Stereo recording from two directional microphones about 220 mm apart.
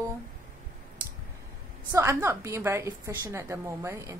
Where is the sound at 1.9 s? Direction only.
15° right (ahead or behind).